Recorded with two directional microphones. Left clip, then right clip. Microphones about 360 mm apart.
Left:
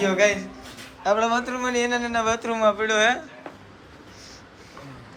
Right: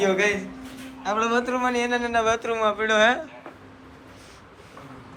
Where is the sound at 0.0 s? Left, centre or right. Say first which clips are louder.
Left 2 dB; centre.